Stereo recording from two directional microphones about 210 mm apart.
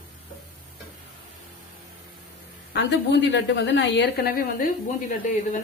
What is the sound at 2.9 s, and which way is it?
A woman's voice, 55° left (ahead or behind).